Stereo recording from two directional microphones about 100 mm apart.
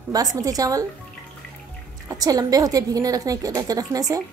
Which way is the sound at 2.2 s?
40° right (ahead or behind).